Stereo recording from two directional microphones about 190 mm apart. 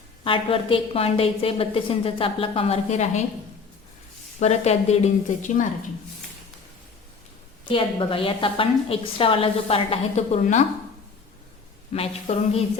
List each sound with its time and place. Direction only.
0.3 s a woman's voice: 30° left (ahead or behind)
4.4 s speech: 35° left (ahead or behind)
7.7 s a woman's voice: 30° left (ahead or behind)
11.9 s speech: 30° left (ahead or behind)